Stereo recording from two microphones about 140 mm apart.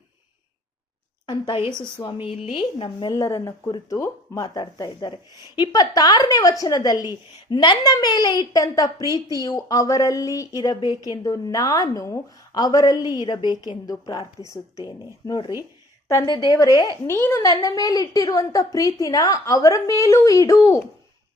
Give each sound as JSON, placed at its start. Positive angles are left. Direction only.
{"t": 1.3, "sound": "speech", "side_deg": 40}
{"t": 3.1, "sound": "a woman's voice", "side_deg": 25}
{"t": 4.4, "sound": "a woman's voice", "side_deg": 30}